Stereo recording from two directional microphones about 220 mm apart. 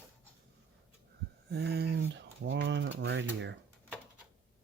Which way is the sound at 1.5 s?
45° right (ahead or behind).